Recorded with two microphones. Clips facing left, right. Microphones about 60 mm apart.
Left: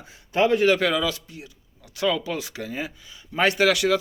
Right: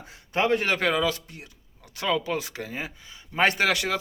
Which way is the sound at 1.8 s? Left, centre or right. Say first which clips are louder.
Left 2 dB; right.